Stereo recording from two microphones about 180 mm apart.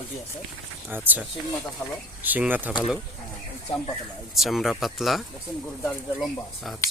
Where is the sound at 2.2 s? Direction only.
10° right (ahead or behind).